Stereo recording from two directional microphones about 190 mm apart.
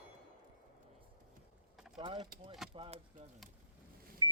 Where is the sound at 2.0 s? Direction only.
25° right (ahead or behind).